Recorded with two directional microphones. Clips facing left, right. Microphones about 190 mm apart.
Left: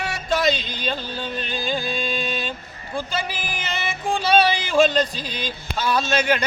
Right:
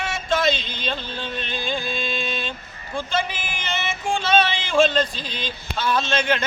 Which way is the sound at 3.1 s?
35° left (ahead or behind).